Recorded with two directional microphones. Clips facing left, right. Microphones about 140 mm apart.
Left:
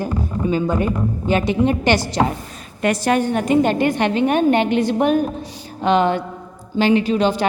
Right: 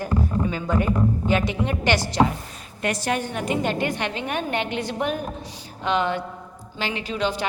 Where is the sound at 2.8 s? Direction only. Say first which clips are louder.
Left 7 dB; 75° left (ahead or behind).